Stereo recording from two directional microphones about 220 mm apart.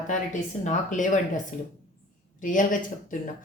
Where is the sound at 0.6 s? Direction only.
35° left (ahead or behind).